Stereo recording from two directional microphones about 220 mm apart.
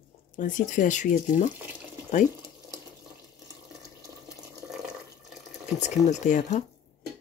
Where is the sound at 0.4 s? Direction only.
35° left (ahead or behind).